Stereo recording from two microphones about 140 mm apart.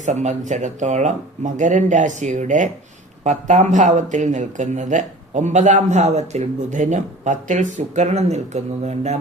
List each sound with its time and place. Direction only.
0.0 s speech: 60° right (ahead or behind)